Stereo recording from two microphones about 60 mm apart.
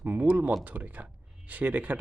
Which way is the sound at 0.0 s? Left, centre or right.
Right.